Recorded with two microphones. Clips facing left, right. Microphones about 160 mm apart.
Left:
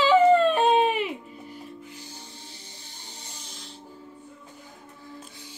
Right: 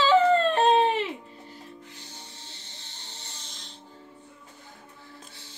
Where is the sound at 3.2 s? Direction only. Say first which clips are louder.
Left 3 dB; 10° left (ahead or behind).